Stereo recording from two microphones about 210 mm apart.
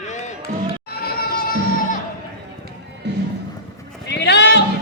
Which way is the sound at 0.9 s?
45° left (ahead or behind).